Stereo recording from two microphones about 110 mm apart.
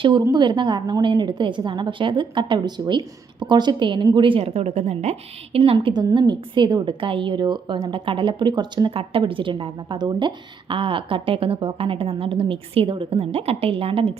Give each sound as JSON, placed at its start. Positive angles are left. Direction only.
{"t": 0.2, "sound": "a woman's voice", "side_deg": -40}
{"t": 5.5, "sound": "a woman's voice", "side_deg": -55}
{"t": 9.0, "sound": "a woman's voice", "side_deg": -55}